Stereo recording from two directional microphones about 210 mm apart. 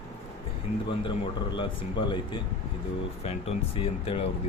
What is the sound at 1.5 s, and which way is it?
Speech, 20° left (ahead or behind).